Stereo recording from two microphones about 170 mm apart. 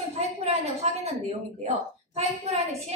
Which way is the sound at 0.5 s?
40° right (ahead or behind).